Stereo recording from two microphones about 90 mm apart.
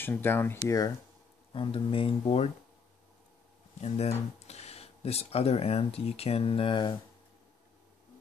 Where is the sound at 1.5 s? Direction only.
75° left (ahead or behind).